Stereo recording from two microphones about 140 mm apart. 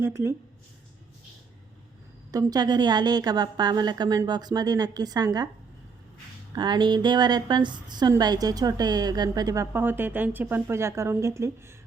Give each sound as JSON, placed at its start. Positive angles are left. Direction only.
{"t": 0.0, "sound": "speech", "side_deg": -20}
{"t": 2.3, "sound": "a woman's voice", "side_deg": -30}
{"t": 6.6, "sound": "a woman's voice", "side_deg": -30}